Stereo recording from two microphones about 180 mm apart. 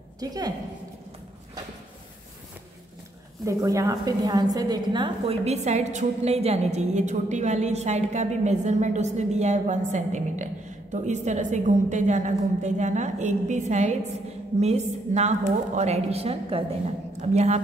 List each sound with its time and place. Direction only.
0.2 s a woman's voice: 20° right (ahead or behind)
3.4 s a woman's voice: 20° right (ahead or behind); by 17.6 s 40° right (ahead or behind)